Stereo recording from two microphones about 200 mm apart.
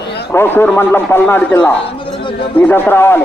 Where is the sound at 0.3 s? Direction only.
10° left (ahead or behind).